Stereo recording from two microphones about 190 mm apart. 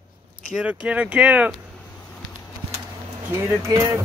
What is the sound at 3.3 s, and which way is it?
Speech, 15° right (ahead or behind).